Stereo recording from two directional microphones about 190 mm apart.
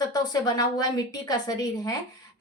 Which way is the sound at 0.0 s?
20° left (ahead or behind).